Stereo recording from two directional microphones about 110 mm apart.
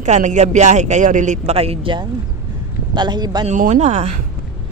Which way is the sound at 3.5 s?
90° right.